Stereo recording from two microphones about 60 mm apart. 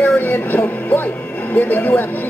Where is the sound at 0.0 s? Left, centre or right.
Left.